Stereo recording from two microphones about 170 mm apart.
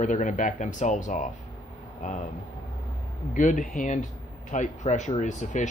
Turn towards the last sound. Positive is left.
turn(degrees=45)  # may be behind; listen again after turning